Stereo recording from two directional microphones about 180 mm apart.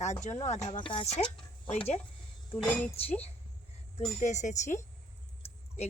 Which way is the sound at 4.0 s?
40° left (ahead or behind).